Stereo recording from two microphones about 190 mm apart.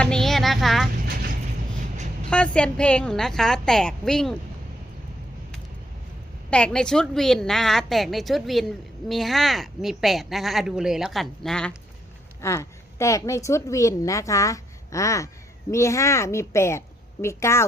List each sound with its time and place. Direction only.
0.0 s a sound: 5° left (ahead or behind)
2.3 s a woman's voice: 5° left (ahead or behind)
6.5 s a woman's voice: 5° left (ahead or behind)
12.4 s a woman's voice: 15° left (ahead or behind)